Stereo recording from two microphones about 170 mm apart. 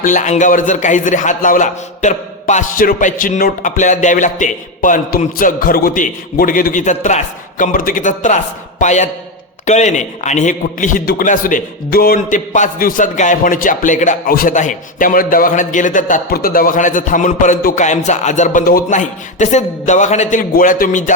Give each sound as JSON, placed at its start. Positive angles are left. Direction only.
{"t": 0.0, "sound": "a man's voice", "side_deg": 50}